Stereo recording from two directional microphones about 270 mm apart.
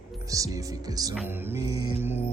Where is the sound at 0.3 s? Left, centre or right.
Centre.